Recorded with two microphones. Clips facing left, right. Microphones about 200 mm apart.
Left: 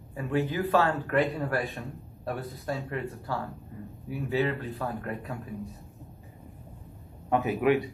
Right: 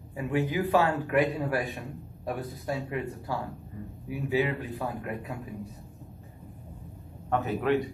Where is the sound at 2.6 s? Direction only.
15° right (ahead or behind).